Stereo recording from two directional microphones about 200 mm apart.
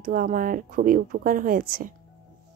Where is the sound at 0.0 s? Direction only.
45° right (ahead or behind).